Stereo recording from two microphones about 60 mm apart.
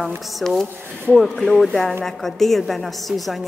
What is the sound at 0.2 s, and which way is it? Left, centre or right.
Speech, centre.